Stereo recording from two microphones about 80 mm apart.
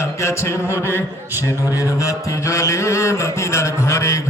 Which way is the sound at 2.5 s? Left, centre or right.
Left.